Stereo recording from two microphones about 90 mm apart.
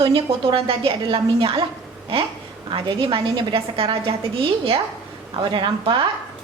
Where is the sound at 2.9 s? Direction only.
85° right.